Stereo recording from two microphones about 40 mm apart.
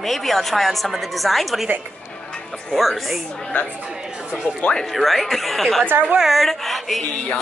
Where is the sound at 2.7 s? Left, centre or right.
Centre.